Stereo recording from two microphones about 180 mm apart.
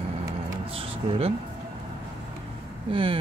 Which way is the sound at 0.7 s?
30° right (ahead or behind).